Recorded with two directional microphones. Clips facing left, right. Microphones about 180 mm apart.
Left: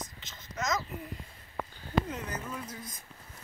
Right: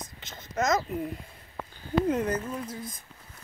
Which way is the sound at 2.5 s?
30° right (ahead or behind).